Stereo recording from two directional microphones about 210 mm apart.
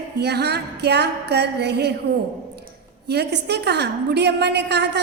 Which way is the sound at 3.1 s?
50° right (ahead or behind).